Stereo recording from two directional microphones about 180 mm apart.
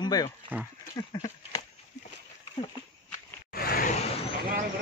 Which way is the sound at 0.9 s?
20° left (ahead or behind).